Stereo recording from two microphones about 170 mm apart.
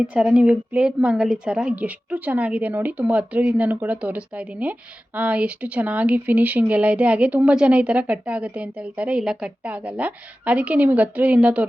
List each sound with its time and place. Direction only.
0.1 s speech: 5° right (ahead or behind)